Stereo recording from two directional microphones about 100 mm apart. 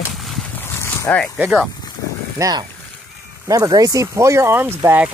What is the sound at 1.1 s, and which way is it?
Speech, 20° left (ahead or behind).